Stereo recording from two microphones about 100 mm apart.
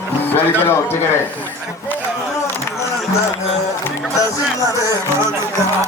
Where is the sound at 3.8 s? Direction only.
30° left (ahead or behind).